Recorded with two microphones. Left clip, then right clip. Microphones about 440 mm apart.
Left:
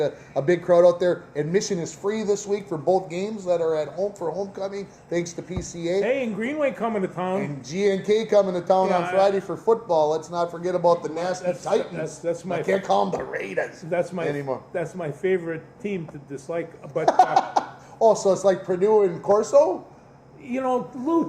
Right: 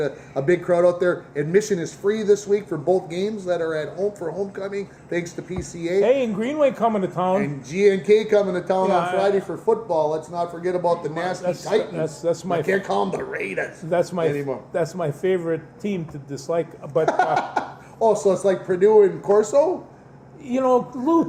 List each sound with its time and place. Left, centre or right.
0.0 s a man's voice: centre
6.1 s a man's voice: right
7.3 s a man's voice: centre
12.2 s a man's voice: right
12.6 s a man's voice: centre
13.9 s a man's voice: right
14.3 s a man's voice: left
14.7 s a man's voice: right
17.1 s a man's voice: left
20.5 s a man's voice: right